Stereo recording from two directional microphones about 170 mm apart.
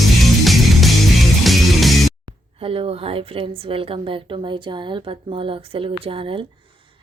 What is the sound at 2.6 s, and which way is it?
A woman's voice, 35° right (ahead or behind).